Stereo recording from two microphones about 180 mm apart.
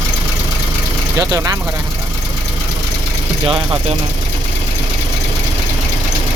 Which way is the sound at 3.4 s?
30° right (ahead or behind).